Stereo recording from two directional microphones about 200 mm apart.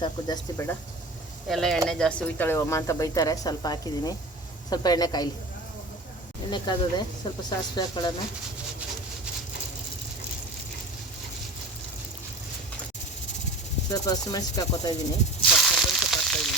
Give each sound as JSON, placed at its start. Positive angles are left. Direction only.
{"t": 0.0, "sound": "snake", "side_deg": 20}
{"t": 1.5, "sound": "speech", "side_deg": 0}
{"t": 4.7, "sound": "snake", "side_deg": 20}
{"t": 6.5, "sound": "snake", "side_deg": 20}
{"t": 13.9, "sound": "snake", "side_deg": 20}
{"t": 15.4, "sound": "frying", "side_deg": 0}